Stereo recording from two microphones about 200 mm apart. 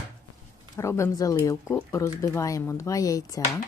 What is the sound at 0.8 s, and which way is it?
Speech, 15° left (ahead or behind).